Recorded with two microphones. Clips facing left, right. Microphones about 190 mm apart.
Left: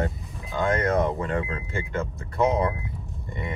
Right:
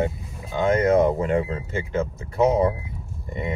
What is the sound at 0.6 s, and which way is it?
Speech, 25° right (ahead or behind).